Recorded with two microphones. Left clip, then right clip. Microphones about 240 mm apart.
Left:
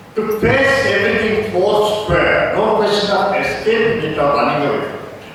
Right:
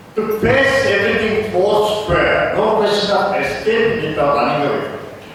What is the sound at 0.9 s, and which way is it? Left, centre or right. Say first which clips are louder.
A man's voice: left 1 dB; centre.